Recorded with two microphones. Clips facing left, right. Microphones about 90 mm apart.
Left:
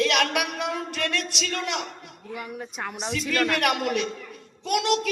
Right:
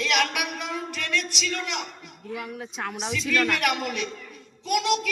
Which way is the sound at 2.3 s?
Centre (ahead or behind).